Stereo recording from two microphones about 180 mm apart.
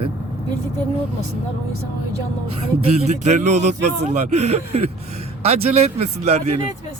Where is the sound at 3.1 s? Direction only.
40° right (ahead or behind).